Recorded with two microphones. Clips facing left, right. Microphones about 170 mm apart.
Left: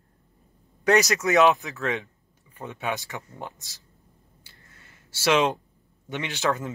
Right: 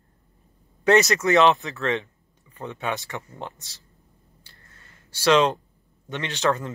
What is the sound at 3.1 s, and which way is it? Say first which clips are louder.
Speech: right 2 dB; 5° left (ahead or behind).